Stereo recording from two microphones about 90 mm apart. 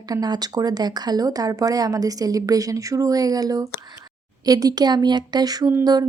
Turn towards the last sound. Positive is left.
turn(degrees=-45)  # may be behind; listen again after turning